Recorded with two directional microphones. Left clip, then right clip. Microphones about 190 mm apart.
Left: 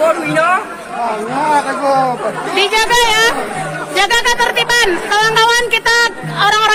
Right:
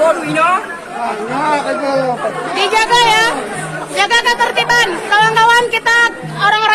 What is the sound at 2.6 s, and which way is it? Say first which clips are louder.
A man's voice: right 1 dB; 40° left (ahead or behind).